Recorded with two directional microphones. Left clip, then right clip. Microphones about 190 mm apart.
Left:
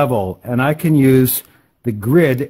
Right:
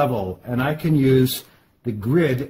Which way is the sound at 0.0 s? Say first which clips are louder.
Left 5 dB; 35° left (ahead or behind).